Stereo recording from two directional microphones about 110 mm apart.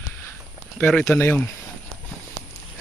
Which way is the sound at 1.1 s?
20° left (ahead or behind).